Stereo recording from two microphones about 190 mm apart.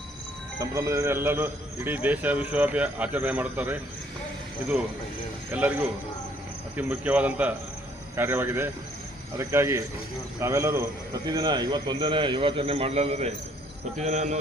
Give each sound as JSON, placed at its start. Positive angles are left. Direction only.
{"t": 0.6, "sound": "a man's voice", "side_deg": -15}
{"t": 5.5, "sound": "a man's voice", "side_deg": -10}
{"t": 6.7, "sound": "a man's voice", "side_deg": -10}
{"t": 14.0, "sound": "cricket", "side_deg": -40}